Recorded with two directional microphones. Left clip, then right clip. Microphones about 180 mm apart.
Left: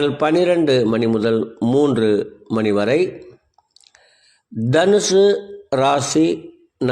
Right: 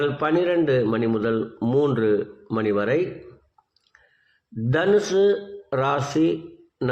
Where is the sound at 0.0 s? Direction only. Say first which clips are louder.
Left 5 dB; 40° left (ahead or behind).